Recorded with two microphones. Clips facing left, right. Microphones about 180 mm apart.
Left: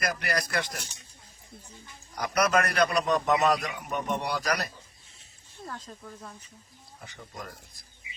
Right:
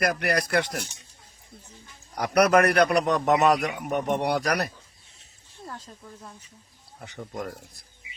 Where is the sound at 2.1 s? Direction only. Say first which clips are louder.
Right 6 dB; 60° right (ahead or behind).